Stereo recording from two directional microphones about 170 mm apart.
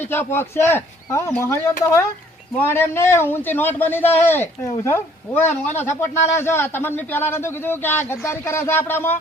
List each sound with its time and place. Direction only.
0.0 s a man's voice: 15° left (ahead or behind)